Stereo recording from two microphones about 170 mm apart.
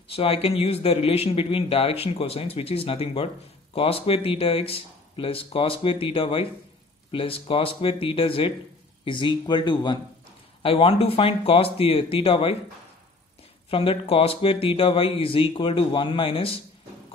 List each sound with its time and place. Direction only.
0.1 s speech: 35° left (ahead or behind)
13.7 s speech: 35° left (ahead or behind)